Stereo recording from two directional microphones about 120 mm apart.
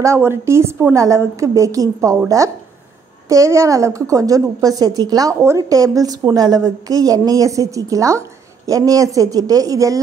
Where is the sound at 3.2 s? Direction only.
25° right (ahead or behind).